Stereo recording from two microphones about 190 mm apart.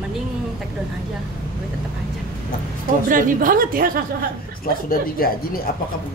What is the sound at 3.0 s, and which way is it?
Speech, 45° right (ahead or behind).